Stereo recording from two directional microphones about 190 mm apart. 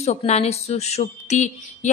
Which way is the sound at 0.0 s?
35° left (ahead or behind).